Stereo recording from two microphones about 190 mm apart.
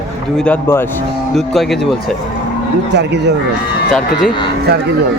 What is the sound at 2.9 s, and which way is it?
Speech, 60° right (ahead or behind).